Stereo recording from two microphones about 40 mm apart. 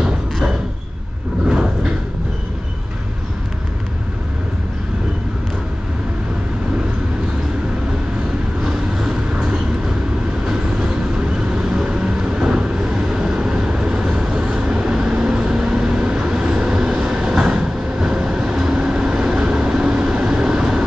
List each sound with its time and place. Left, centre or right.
8.6 s vehicle: centre
10.4 s train: centre
11.6 s vehicle: right